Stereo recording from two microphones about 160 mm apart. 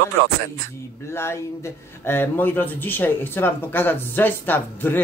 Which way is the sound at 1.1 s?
15° left (ahead or behind).